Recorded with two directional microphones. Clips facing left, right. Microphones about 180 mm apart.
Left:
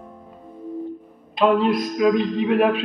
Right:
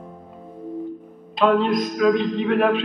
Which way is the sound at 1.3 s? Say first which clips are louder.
Even; 10° left (ahead or behind).